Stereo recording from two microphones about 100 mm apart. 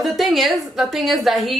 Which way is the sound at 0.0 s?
Centre (ahead or behind).